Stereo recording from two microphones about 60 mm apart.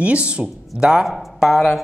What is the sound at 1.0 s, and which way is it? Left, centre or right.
Speech, centre.